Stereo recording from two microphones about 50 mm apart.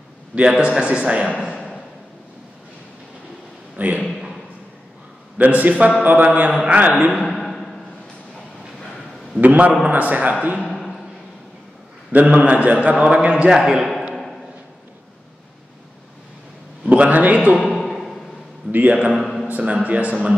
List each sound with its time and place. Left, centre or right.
0.4 s a man's voice: centre
3.7 s a man's voice: right
5.4 s a man's voice: right
7.2 s a sound: centre
9.4 s a man's voice: right
10.7 s a sound: centre
12.1 s a man's voice: right
13.5 s a man's voice: centre
16.9 s a man's voice: right
17.6 s a sound: centre
18.7 s a man's voice: right
19.1 s a sound: centre
19.4 s a man's voice: right